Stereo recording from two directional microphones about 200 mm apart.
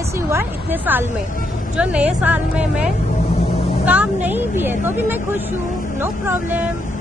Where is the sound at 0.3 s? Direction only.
10° right (ahead or behind).